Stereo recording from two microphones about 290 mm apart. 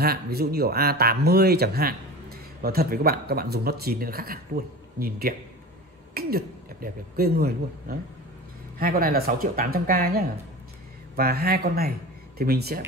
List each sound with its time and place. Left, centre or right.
0.0 s speech: right